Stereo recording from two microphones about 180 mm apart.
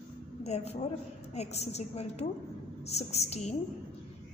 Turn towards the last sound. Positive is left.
turn(degrees=35)  # may be behind; listen again after turning